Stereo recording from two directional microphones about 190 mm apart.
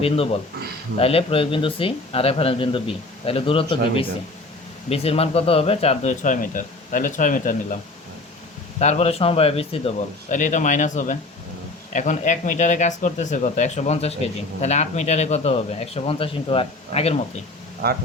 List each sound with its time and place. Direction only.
0.0 s speech: 30° left (ahead or behind)
4.9 s speech: 30° left (ahead or behind)
8.8 s speech: 35° left (ahead or behind)
17.8 s speech: 55° right (ahead or behind)